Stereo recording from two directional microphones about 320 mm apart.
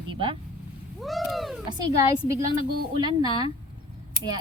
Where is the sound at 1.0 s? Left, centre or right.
Centre.